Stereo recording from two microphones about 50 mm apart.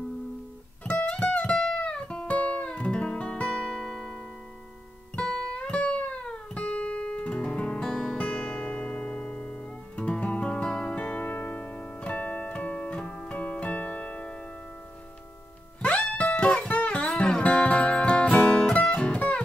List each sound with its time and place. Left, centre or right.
0.8 s music: left
5.5 s music: left
7.8 s music: centre
8.2 s music: centre
11.1 s music: left
13.3 s keyboard: left
15.8 s music: left